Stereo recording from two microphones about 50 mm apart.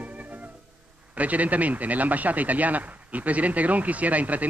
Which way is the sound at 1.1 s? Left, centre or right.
Right.